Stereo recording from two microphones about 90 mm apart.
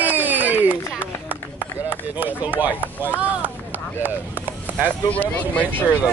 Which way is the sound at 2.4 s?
20° right (ahead or behind).